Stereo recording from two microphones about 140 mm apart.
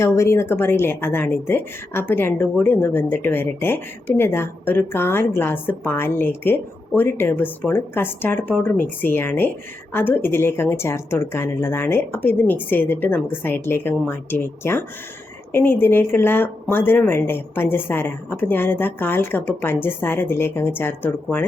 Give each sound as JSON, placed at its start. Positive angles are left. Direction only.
{"t": 0.0, "sound": "a woman's voice", "side_deg": 20}